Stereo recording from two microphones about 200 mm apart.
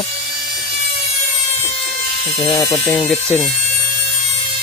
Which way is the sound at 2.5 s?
10° left (ahead or behind).